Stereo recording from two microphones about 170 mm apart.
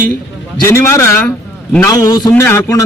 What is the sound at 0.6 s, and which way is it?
A man's voice, 15° left (ahead or behind).